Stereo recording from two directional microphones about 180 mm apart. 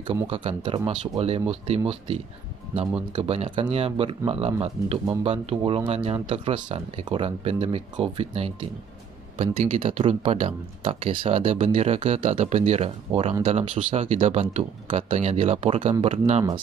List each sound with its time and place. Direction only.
0.3 s speech: 30° right (ahead or behind)
5.6 s speech: 20° right (ahead or behind)
5.9 s speech: 35° right (ahead or behind)